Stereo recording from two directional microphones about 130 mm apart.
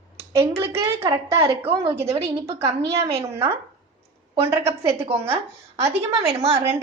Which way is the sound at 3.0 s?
50° right (ahead or behind).